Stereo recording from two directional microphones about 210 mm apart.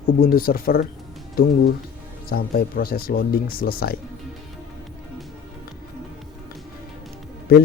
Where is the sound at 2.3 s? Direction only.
45° left (ahead or behind).